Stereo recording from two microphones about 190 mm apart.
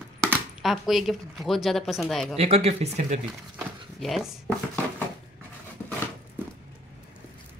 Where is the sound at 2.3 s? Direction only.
30° right (ahead or behind).